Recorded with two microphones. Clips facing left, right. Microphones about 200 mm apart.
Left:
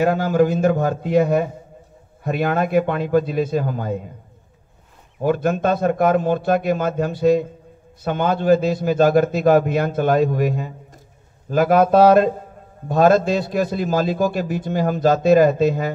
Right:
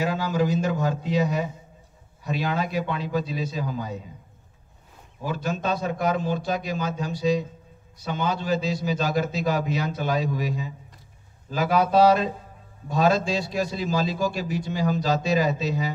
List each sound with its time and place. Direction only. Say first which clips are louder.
0.0 s a man's voice: left 8 dB; 55° left (ahead or behind)
5.2 s a man's voice: left 9 dB; 55° left (ahead or behind)